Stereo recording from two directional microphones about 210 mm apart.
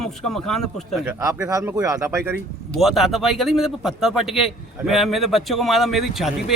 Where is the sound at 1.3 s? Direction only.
15° right (ahead or behind).